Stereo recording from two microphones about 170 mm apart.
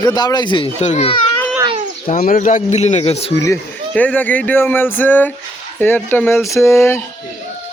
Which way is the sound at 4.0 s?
10° left (ahead or behind).